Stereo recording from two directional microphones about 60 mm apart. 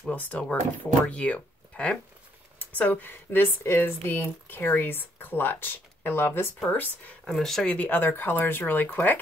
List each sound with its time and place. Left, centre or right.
0.1 s speech: left
7.2 s speech: centre
7.6 s speech: left
8.0 s speech: left